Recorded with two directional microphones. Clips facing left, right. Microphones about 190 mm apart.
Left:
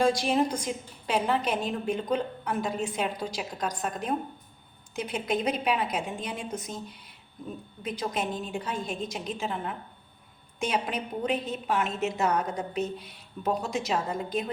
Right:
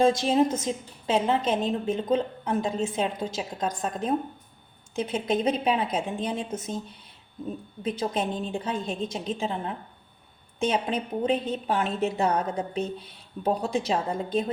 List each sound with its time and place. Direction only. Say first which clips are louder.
0.0 s a woman's voice: right 3 dB; 25° right (ahead or behind)
7.8 s a woman's voice: right 3 dB; 30° right (ahead or behind)